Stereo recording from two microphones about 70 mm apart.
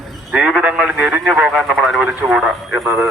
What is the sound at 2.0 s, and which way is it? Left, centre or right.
Speech, right.